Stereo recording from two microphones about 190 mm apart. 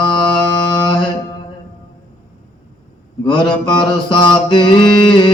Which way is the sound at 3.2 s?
25° left (ahead or behind).